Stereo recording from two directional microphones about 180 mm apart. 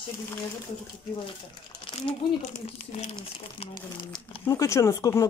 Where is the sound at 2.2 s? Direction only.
25° left (ahead or behind).